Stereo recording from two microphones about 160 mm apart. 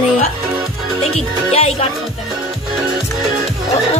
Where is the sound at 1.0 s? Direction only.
40° left (ahead or behind).